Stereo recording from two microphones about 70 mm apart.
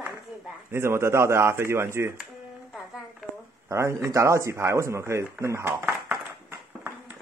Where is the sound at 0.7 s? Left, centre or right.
Right.